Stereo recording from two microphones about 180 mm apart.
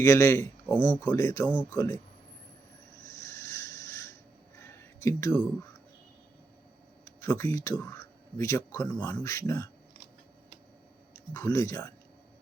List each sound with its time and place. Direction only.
0.0 s speech: 15° left (ahead or behind)
3.0 s rub: 20° left (ahead or behind)
4.5 s a sound: 15° left (ahead or behind)
7.2 s speech: 15° left (ahead or behind)
11.3 s speech: 15° left (ahead or behind)